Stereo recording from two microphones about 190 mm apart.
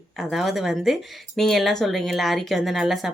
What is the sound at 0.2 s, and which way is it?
Speech, centre (ahead or behind).